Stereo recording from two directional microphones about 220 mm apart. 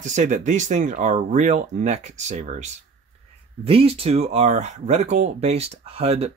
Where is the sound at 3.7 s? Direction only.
25° right (ahead or behind).